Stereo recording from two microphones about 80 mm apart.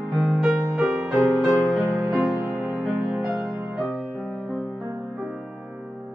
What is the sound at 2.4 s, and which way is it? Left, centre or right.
Music, right.